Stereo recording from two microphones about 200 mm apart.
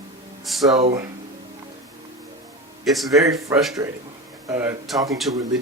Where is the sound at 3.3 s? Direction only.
15° right (ahead or behind).